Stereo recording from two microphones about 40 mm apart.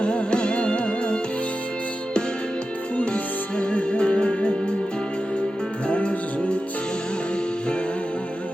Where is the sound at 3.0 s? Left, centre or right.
Left.